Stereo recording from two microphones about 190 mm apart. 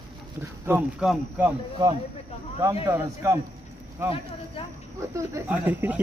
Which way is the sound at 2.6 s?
15° right (ahead or behind).